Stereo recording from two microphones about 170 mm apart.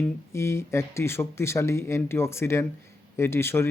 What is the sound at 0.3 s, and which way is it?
Speech, 15° left (ahead or behind).